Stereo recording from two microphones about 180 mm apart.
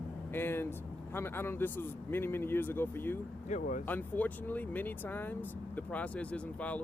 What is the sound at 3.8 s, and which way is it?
Speech, 10° left (ahead or behind).